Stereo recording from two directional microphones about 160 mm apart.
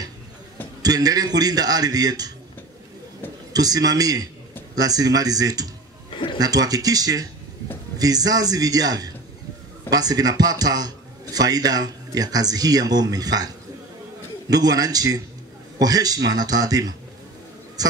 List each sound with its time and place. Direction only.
0.8 s speech: 25° right (ahead or behind)
3.5 s speech: 25° right (ahead or behind)
6.0 s a sound: 35° left (ahead or behind)
6.4 s speech: 25° right (ahead or behind)
14.5 s speech: 25° right (ahead or behind)